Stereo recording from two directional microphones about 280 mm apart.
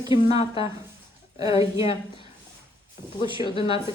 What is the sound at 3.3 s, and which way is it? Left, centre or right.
Speech, centre.